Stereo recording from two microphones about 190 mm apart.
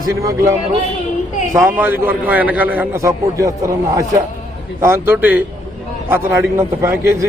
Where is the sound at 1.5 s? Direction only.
10° right (ahead or behind).